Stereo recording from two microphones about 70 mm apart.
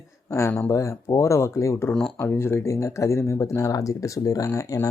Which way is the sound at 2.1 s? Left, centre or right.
Left.